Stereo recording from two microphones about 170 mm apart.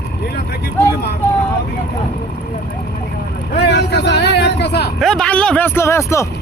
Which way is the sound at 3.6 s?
80° left.